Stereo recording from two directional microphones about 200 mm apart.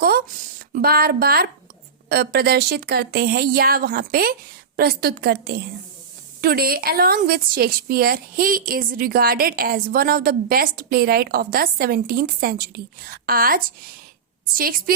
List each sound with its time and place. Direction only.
0.0 s a woman's voice: 45° right (ahead or behind)